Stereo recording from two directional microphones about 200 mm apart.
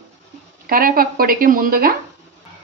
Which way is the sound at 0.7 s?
45° right (ahead or behind).